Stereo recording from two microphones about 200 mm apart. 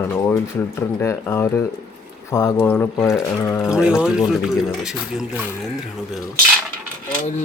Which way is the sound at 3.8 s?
5° right (ahead or behind).